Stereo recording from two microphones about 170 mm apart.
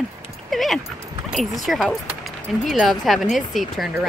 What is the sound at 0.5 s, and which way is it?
Dog, centre (ahead or behind).